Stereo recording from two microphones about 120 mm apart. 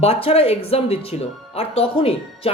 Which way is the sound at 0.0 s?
55° left (ahead or behind).